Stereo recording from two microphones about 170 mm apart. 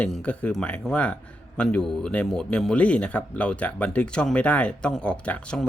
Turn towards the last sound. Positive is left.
turn(degrees=5)  # may be behind; listen again after turning